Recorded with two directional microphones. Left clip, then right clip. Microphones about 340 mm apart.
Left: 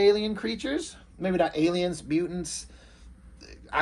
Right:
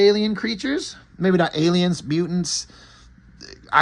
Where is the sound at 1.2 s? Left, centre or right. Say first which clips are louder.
Right 5 dB; right.